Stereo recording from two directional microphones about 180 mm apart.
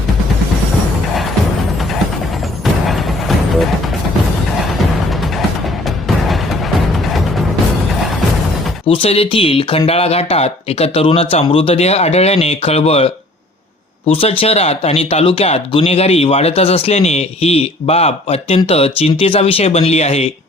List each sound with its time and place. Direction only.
2.8 s music: centre (ahead or behind)
6.2 s music: centre (ahead or behind)
8.9 s speech: 30° left (ahead or behind)